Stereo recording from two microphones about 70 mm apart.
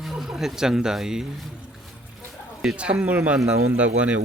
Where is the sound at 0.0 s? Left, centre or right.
Centre.